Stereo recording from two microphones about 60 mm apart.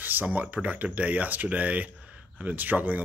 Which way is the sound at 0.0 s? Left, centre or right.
Right.